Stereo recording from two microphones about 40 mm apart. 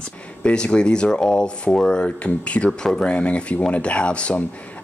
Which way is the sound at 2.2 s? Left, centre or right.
Left.